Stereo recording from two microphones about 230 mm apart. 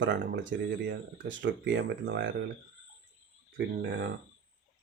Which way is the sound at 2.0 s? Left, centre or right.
Right.